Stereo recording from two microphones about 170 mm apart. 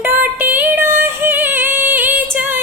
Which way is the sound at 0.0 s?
10° right (ahead or behind).